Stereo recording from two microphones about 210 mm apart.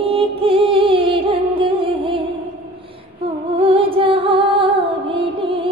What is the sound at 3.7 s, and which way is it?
Music, 25° right (ahead or behind).